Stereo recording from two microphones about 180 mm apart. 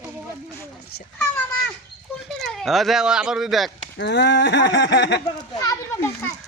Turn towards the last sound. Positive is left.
turn(degrees=15)  # may be behind; listen again after turning